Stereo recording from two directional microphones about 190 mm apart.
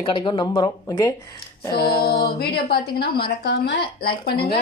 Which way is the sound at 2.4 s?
55° left (ahead or behind).